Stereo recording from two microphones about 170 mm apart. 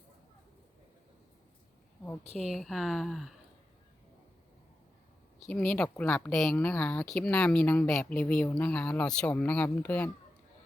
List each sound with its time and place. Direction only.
2.5 s speech: centre (ahead or behind)
5.5 s speech: 5° left (ahead or behind)